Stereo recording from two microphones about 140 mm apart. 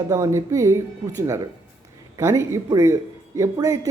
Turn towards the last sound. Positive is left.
turn(degrees=-20)  # may be behind; listen again after turning